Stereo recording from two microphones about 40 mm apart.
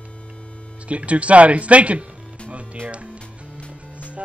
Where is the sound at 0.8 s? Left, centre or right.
Right.